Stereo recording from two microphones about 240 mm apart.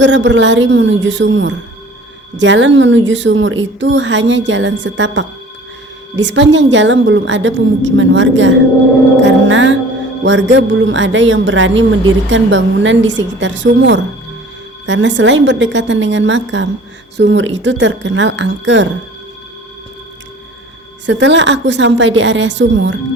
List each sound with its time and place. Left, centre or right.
0.0 s a woman's voice: right
21.1 s a woman's voice: right